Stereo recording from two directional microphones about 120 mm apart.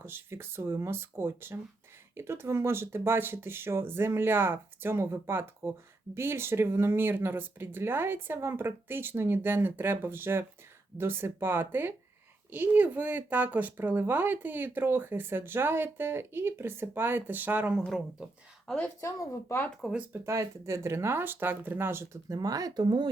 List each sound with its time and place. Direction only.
0.0 s speech: 20° right (ahead or behind); by 18.3 s 5° right (ahead or behind)
18.9 s speech: 25° left (ahead or behind)
19.8 s speech: 10° right (ahead or behind)
20.2 s speech: 25° right (ahead or behind)